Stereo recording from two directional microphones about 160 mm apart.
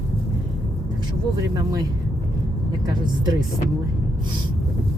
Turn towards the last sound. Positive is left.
turn(degrees=-25)  # may be behind; listen again after turning